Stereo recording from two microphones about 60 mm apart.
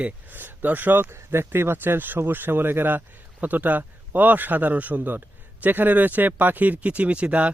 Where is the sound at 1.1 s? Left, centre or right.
Right.